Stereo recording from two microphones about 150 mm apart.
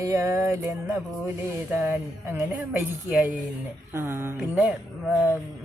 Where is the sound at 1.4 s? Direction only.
15° right (ahead or behind).